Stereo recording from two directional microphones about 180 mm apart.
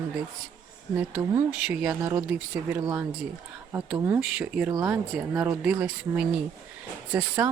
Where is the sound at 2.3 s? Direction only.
10° right (ahead or behind).